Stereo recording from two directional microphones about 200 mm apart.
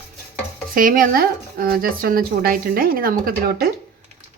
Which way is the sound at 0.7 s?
45° right (ahead or behind).